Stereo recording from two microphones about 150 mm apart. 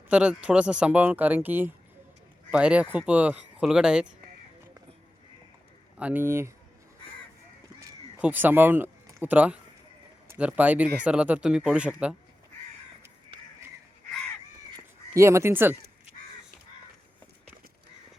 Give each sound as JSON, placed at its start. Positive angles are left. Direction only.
{"t": 0.1, "sound": "speech", "side_deg": -10}
{"t": 6.0, "sound": "speech", "side_deg": -10}
{"t": 8.2, "sound": "speech", "side_deg": -10}
{"t": 15.1, "sound": "speech", "side_deg": -20}